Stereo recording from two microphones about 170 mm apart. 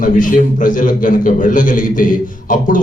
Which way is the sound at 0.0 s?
50° left (ahead or behind).